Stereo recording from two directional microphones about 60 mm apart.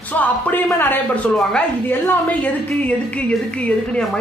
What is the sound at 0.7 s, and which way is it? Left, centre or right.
A woman's voice, left.